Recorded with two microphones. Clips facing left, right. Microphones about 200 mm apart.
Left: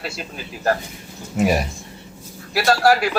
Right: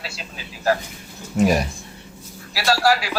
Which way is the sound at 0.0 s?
50° left (ahead or behind).